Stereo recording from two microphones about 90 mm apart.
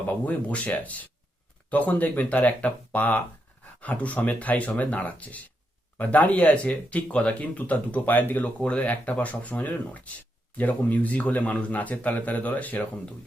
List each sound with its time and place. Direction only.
0.1 s speech: 15° left (ahead or behind)